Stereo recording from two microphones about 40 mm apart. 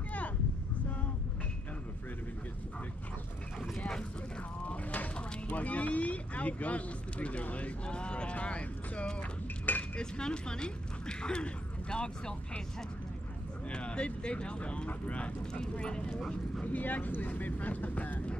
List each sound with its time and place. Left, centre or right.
4.6 s speech: left
13.7 s speech: left
16.6 s speech: left